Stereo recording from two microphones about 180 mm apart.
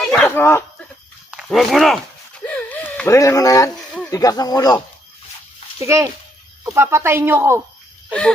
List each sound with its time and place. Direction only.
0.0 s dog: 5° left (ahead or behind)
0.3 s speech: 15° left (ahead or behind)
1.3 s speech: centre (ahead or behind); by 3.7 s 20° left (ahead or behind)
3.8 s a sound: 5° left (ahead or behind)
4.1 s speech: 20° left (ahead or behind)
5.8 s speech: 15° right (ahead or behind)